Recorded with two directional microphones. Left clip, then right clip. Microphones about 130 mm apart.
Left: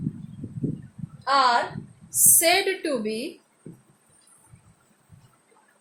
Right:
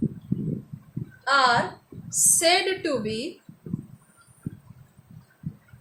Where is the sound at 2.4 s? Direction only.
Centre (ahead or behind).